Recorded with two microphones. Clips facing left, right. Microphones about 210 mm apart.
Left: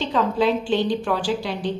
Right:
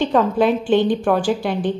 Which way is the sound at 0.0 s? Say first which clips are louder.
Right 4 dB; 50° right (ahead or behind).